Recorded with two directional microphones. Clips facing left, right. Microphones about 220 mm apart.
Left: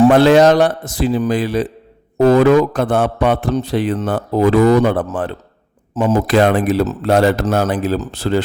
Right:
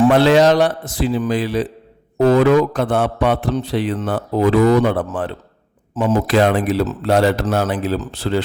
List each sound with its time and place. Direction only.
0.0 s a man's voice: 45° left (ahead or behind)